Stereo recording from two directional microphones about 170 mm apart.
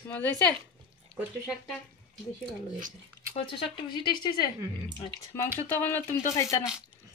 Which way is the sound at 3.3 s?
30° left (ahead or behind).